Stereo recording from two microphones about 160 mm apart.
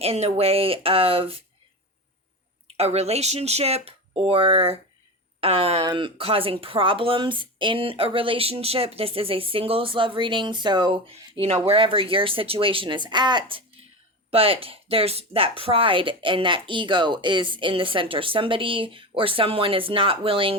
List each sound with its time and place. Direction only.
0.0 s speech: 40° right (ahead or behind)
2.7 s speech: 40° right (ahead or behind)